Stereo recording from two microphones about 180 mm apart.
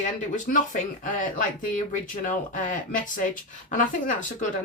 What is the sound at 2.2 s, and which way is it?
Speech, 45° left (ahead or behind).